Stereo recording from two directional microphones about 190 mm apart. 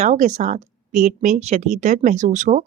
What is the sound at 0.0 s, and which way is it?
Speech, 40° right (ahead or behind).